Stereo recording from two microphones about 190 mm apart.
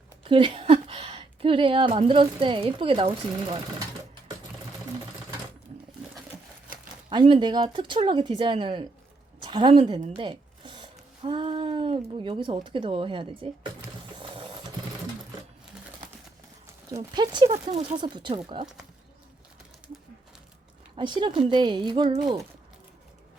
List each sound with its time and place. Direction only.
0.3 s speech: 25° right (ahead or behind)
7.1 s a woman's voice: 25° right (ahead or behind)
14.1 s a sound: 25° right (ahead or behind)
16.9 s speech: 25° right (ahead or behind)
17.5 s speech: 35° right (ahead or behind)
17.9 s speech: 25° right (ahead or behind)
20.9 s speech: 25° right (ahead or behind)